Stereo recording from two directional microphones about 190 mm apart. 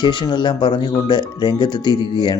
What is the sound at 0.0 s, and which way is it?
Speech, 25° left (ahead or behind).